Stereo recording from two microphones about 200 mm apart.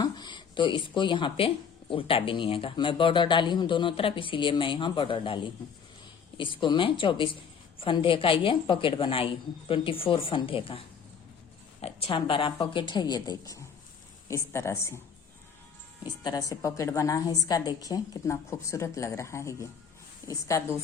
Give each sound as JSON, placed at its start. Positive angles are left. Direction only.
{"t": 0.0, "sound": "a woman's voice", "side_deg": 20}
{"t": 16.2, "sound": "a woman's voice", "side_deg": 20}